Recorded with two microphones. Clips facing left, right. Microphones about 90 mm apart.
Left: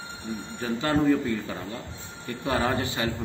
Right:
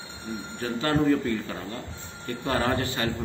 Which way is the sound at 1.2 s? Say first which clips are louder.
Even; 15° left (ahead or behind).